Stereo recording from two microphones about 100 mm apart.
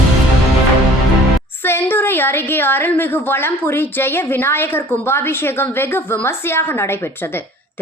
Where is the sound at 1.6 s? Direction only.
20° left (ahead or behind).